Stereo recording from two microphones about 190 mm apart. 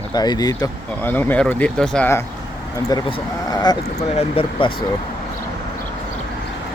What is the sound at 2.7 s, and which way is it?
Speech, 20° left (ahead or behind).